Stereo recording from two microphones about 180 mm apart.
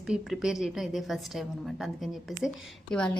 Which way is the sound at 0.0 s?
5° right (ahead or behind).